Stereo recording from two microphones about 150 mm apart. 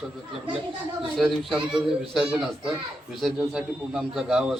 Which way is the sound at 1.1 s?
Centre (ahead or behind).